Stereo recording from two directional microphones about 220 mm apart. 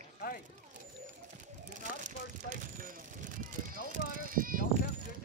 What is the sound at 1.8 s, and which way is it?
Vehicle, 35° right (ahead or behind).